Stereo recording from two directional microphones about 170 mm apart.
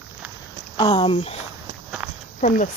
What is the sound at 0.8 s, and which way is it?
Speech, 25° left (ahead or behind).